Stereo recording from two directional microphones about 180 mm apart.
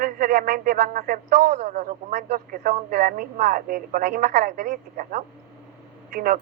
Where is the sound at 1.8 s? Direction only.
40° right (ahead or behind).